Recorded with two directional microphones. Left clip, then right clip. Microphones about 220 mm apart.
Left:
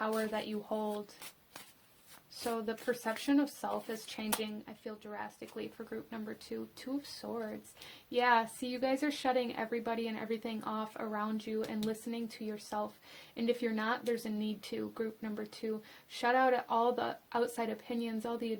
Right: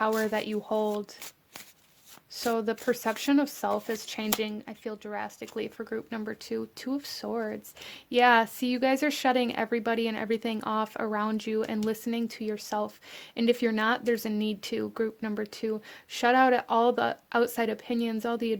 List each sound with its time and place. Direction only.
0.0 s speech: 45° right (ahead or behind)
2.4 s speech: 45° right (ahead or behind)